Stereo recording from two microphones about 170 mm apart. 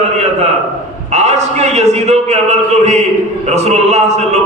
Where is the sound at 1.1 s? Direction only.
40° right (ahead or behind).